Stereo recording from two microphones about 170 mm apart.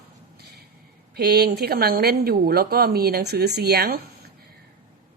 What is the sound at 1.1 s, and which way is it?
A woman's voice, 70° right (ahead or behind).